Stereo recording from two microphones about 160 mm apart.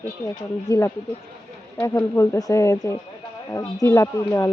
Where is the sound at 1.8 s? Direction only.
20° left (ahead or behind).